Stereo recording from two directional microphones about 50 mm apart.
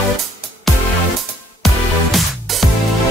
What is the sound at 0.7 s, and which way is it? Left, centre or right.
Music, centre.